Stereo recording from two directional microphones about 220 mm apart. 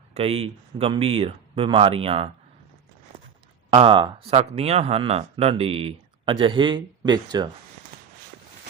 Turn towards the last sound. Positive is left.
turn(degrees=-20)  # may be behind; listen again after turning